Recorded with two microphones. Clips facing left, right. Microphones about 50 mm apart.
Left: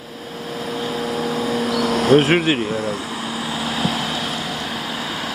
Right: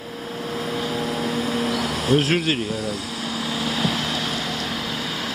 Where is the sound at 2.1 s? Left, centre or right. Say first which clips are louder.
Left 5 dB; left.